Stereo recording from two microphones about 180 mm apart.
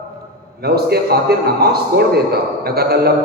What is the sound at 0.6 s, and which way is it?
A man's voice, 60° right (ahead or behind).